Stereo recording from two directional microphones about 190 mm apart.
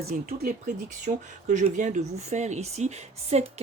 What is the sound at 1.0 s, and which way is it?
Speech, 40° right (ahead or behind).